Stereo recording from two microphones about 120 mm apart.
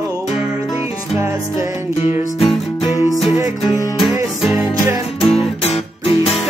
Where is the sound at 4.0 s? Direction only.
Centre (ahead or behind).